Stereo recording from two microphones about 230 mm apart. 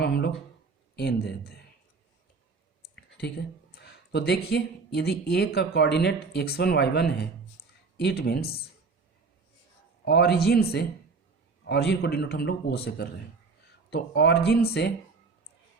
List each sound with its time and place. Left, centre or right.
0.0 s a sound: left
0.9 s a man's voice: left
2.9 s a man's voice: left
10.1 s a man's voice: left